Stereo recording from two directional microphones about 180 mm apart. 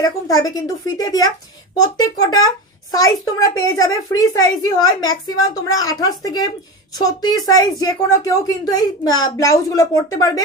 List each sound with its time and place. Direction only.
0.0 s a woman's voice: 20° left (ahead or behind)